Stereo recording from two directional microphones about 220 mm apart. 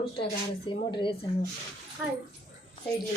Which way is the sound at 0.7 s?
20° left (ahead or behind).